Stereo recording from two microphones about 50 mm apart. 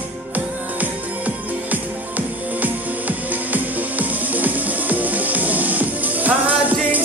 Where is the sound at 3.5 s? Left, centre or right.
Right.